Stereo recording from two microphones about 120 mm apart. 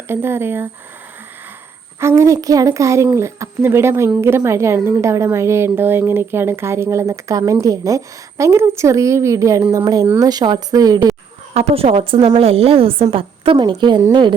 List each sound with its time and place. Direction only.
0.1 s speech: 20° right (ahead or behind)
2.0 s speech: 25° right (ahead or behind)
11.5 s a woman's voice: 55° right (ahead or behind)